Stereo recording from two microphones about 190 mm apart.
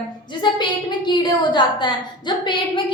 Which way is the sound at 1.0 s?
25° left (ahead or behind).